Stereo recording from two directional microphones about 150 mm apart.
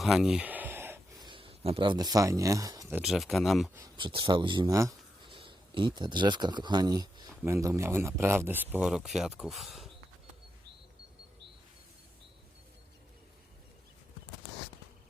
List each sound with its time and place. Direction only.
0.0 s a sound: 5° right (ahead or behind)
1.2 s speech: 35° right (ahead or behind)
2.9 s speech: centre (ahead or behind)
3.9 s speech: 30° right (ahead or behind)
5.2 s speech: 35° right (ahead or behind); by 9.9 s centre (ahead or behind)